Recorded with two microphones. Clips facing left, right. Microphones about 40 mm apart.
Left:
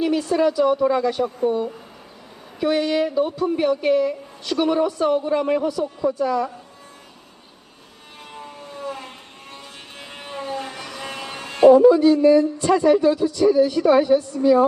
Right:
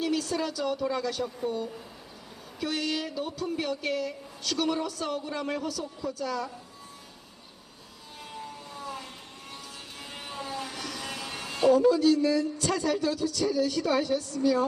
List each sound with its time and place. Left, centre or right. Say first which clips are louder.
0.0 s a woman's voice: left 10 dB; left
8.3 s vehicle: left 4 dB; left
10.0 s a sound: left 6 dB; left
11.9 s a woman's voice: left 9 dB; left